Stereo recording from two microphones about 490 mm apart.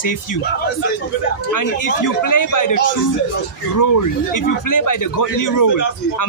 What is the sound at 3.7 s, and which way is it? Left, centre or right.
A man's voice, left.